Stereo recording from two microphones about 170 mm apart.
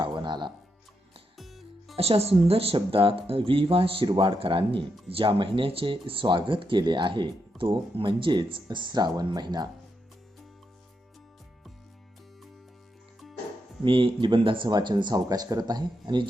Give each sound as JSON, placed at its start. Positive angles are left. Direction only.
{"t": 0.0, "sound": "music", "side_deg": -25}
{"t": 1.4, "sound": "music", "side_deg": 0}
{"t": 2.0, "sound": "speech", "side_deg": -35}
{"t": 13.8, "sound": "speech", "side_deg": -30}